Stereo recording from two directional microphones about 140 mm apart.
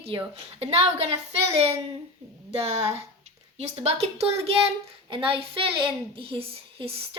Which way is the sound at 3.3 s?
50° right (ahead or behind).